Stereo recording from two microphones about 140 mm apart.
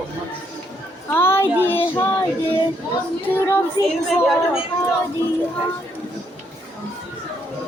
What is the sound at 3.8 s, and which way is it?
Speech, 25° right (ahead or behind).